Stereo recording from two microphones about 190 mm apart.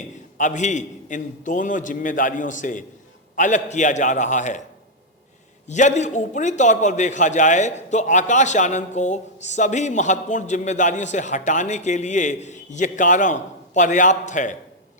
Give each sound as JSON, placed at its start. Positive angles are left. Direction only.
{"t": 0.3, "sound": "a man's voice", "side_deg": 40}
{"t": 5.6, "sound": "a man's voice", "side_deg": 40}